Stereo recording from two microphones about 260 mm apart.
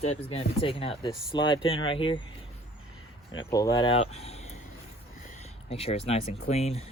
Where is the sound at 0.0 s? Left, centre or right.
Left.